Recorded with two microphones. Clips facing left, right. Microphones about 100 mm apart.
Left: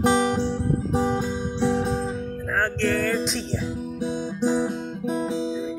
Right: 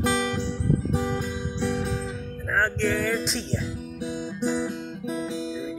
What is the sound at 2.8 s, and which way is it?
Music, 5° right (ahead or behind).